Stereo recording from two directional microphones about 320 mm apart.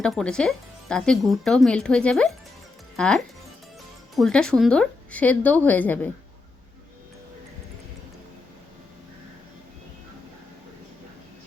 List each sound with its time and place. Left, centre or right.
0.0 s speech: centre